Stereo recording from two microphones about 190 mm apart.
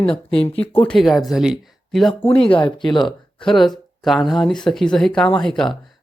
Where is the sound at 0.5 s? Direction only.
10° left (ahead or behind).